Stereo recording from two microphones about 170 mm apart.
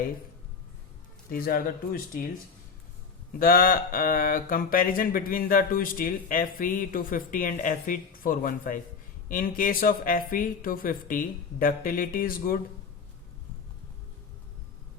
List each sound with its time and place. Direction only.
1.3 s speech: 60° left (ahead or behind)
3.3 s speech: 55° left (ahead or behind)